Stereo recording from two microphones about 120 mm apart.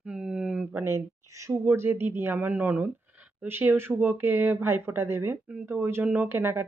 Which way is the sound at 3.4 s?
20° right (ahead or behind).